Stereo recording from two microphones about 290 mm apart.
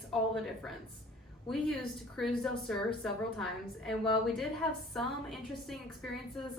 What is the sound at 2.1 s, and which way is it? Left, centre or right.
A woman's voice, centre.